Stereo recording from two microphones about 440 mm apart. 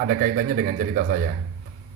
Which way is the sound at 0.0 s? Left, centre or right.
Centre.